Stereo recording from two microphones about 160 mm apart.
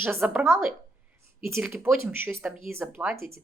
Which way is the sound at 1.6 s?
15° right (ahead or behind).